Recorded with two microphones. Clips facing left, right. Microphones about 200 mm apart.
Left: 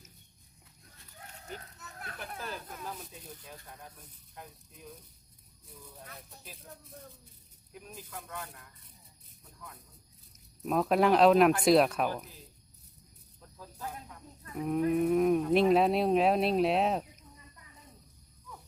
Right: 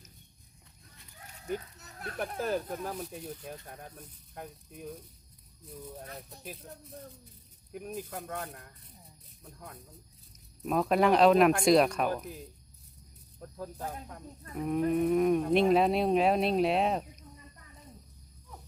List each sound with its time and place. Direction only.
2.3 s speech: 45° right (ahead or behind)
3.0 s speech: 65° right (ahead or behind)
7.7 s speech: 55° right (ahead or behind)
10.6 s speech: centre (ahead or behind)
13.6 s speech: 45° right (ahead or behind)
14.5 s speech: centre (ahead or behind)